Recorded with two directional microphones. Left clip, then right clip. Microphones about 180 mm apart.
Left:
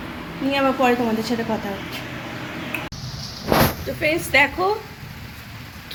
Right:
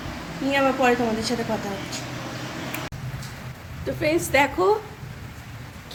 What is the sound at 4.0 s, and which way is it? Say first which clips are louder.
Speech: left 3 dB; 5° right (ahead or behind).